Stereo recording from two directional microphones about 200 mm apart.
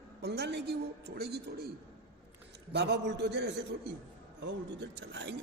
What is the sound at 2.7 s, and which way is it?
A man's voice, 60° right (ahead or behind).